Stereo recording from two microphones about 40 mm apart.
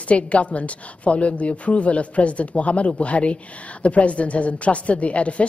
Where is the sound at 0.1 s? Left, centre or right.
Left.